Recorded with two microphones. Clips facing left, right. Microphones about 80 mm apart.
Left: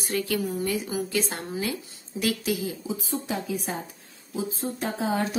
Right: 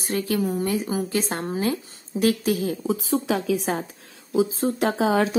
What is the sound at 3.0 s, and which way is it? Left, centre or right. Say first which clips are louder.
Speech: right 7 dB; right.